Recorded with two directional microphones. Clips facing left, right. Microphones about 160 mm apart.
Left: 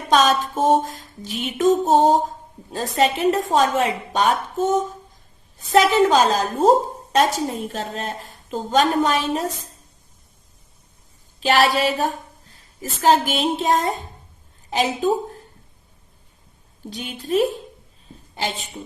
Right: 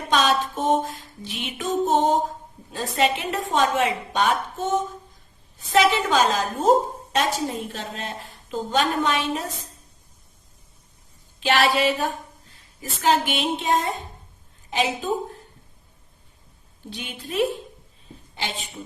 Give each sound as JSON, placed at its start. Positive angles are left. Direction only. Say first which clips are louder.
{"t": 0.1, "sound": "a woman's voice", "louder": "left 4 dB", "side_deg": 40}
{"t": 11.3, "sound": "a woman's voice", "louder": "left 3 dB", "side_deg": 40}
{"t": 16.9, "sound": "a woman's voice", "louder": "left 8 dB", "side_deg": 40}